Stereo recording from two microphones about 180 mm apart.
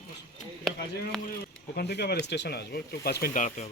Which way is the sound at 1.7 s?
65° left (ahead or behind).